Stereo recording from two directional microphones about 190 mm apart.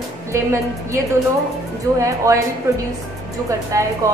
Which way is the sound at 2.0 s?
15° right (ahead or behind).